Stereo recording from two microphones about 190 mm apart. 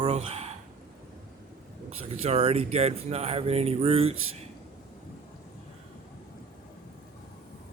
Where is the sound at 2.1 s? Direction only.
35° right (ahead or behind).